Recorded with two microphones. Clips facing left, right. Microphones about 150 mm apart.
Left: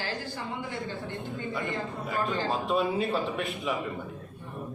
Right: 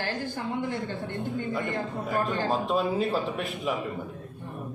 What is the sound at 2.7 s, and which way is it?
A man's voice, centre (ahead or behind).